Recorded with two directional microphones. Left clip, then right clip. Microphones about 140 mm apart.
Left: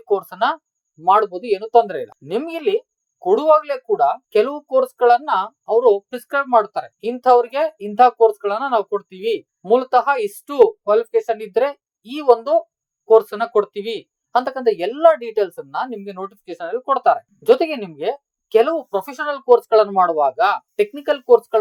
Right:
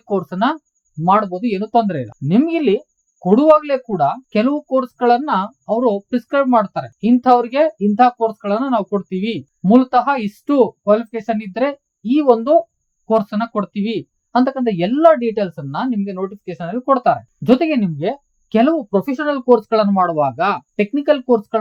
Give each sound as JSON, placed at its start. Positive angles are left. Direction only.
{"t": 0.1, "sound": "speech", "side_deg": 40}